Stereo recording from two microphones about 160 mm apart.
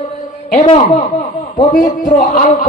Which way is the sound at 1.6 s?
55° left (ahead or behind).